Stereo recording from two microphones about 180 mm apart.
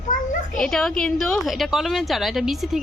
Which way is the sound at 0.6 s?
5° left (ahead or behind).